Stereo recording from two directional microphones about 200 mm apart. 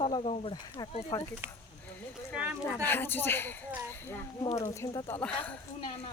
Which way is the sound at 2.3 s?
5° right (ahead or behind).